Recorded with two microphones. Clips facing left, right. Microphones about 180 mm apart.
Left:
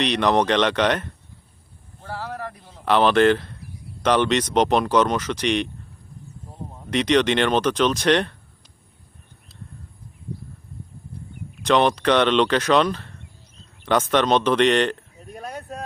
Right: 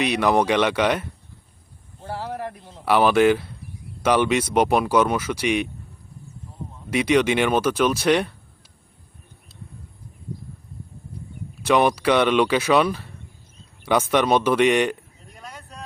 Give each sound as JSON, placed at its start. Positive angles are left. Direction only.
{"t": 0.0, "sound": "speech", "side_deg": -10}
{"t": 2.0, "sound": "a sound", "side_deg": -20}
{"t": 2.8, "sound": "speech", "side_deg": -10}
{"t": 6.9, "sound": "speech", "side_deg": -10}
{"t": 11.6, "sound": "speech", "side_deg": -10}
{"t": 15.4, "sound": "vehicle", "side_deg": 45}